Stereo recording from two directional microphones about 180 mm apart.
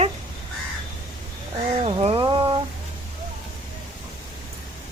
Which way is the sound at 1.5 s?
30° right (ahead or behind).